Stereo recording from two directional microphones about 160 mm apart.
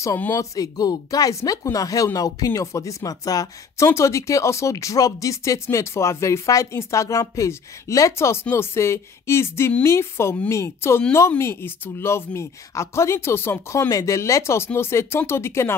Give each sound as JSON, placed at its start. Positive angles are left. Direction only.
{"t": 0.0, "sound": "speech", "side_deg": 15}